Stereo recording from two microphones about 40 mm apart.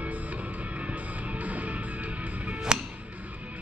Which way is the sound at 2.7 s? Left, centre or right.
Centre.